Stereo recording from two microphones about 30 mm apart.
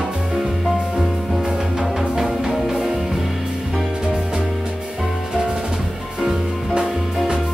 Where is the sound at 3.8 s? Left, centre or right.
Right.